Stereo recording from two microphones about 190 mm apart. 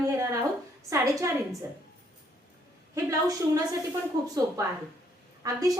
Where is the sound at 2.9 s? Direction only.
15° right (ahead or behind).